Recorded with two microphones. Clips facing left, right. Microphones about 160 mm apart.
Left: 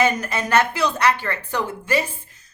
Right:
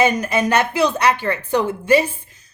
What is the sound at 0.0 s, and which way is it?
A woman's voice, 15° right (ahead or behind).